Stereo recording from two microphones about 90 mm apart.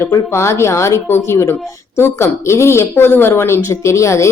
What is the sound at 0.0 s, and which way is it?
Speech, 30° left (ahead or behind).